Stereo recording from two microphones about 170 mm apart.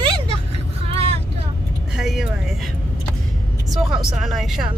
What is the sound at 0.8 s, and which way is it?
Vehicle, 35° right (ahead or behind).